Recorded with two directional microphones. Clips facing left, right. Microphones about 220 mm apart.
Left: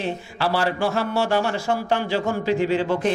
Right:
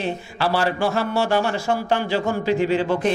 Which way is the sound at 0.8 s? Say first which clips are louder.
Right 1 dB; 30° right (ahead or behind).